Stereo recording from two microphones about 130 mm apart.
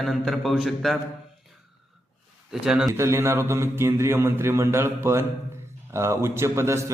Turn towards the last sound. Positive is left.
turn(degrees=-20)  # may be behind; listen again after turning